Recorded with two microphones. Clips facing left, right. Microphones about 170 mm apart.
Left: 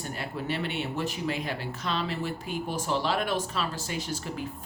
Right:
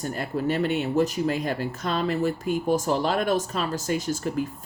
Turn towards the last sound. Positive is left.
turn(degrees=-45)  # may be behind; listen again after turning